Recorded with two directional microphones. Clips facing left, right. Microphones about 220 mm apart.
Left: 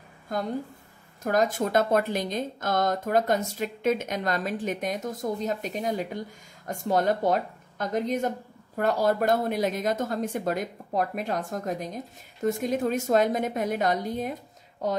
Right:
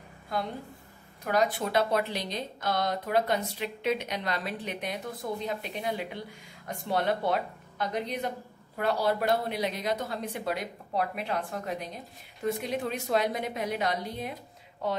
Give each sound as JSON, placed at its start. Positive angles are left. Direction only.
{"t": 0.3, "sound": "a woman's voice", "side_deg": 45}